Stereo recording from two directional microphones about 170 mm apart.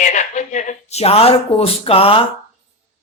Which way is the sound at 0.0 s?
45° left (ahead or behind).